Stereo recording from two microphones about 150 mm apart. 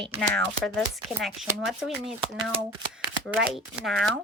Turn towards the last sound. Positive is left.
turn(degrees=0)  # may be behind; listen again after turning